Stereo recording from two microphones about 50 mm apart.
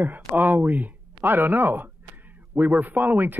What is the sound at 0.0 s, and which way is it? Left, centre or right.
Speech, right.